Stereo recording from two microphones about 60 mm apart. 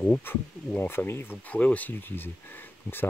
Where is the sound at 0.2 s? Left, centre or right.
Left.